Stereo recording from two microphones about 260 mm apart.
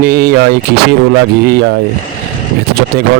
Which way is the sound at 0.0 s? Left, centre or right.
Right.